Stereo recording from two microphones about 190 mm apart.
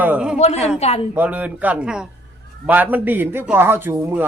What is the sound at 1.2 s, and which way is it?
A man's voice, 10° right (ahead or behind).